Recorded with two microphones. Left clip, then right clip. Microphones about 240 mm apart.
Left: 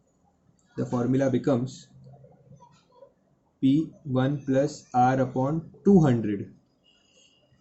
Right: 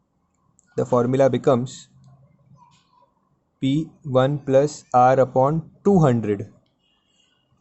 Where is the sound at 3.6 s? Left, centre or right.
Right.